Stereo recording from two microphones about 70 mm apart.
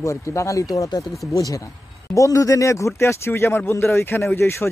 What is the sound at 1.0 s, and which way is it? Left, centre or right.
Speech, centre.